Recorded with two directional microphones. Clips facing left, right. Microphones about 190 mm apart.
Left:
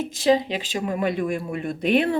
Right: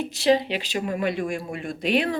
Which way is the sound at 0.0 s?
45° left (ahead or behind).